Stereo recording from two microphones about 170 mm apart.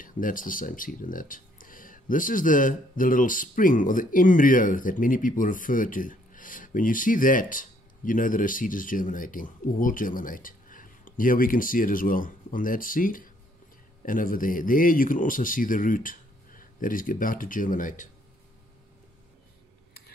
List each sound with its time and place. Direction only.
0.0 s speech: 55° left (ahead or behind)